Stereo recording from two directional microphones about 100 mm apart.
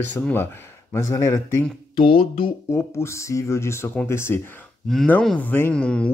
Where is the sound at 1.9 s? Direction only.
65° left (ahead or behind).